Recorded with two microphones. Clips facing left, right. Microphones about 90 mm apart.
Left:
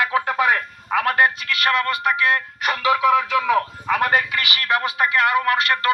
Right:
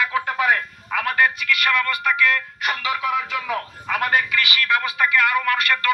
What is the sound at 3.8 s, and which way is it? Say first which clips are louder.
A man's voice: right 2 dB; 35° left (ahead or behind).